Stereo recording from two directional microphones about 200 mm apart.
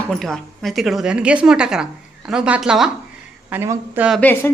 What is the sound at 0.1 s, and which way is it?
A woman's voice, centre (ahead or behind).